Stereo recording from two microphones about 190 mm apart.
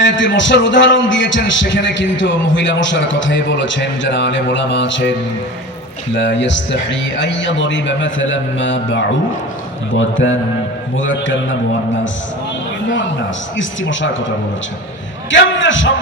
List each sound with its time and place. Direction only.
0.0 s a man's voice: 75° left (ahead or behind)
6.1 s a man's voice: 70° left (ahead or behind)
13.6 s a man's voice: 75° left (ahead or behind)
15.3 s a man's voice: 75° left (ahead or behind)